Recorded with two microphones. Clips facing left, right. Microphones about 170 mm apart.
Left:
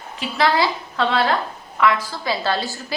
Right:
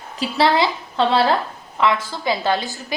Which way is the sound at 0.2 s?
30° right (ahead or behind).